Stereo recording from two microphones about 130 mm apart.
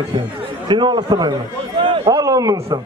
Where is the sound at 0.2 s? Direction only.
35° right (ahead or behind).